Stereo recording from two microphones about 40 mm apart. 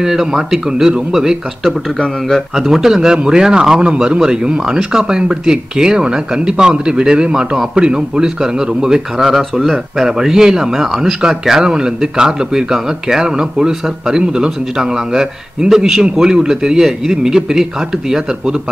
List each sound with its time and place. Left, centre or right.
0.0 s speech: centre
2.5 s speech: centre
3.8 s speech: right
9.2 s speech: centre